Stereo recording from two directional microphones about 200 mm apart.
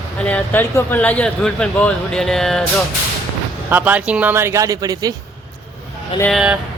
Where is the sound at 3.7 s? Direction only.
10° right (ahead or behind).